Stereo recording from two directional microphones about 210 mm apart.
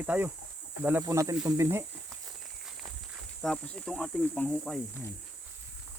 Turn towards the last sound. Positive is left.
turn(degrees=10)  # may be behind; listen again after turning